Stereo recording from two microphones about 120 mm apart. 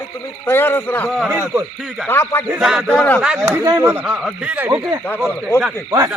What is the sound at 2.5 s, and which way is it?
Speech, 5° right (ahead or behind).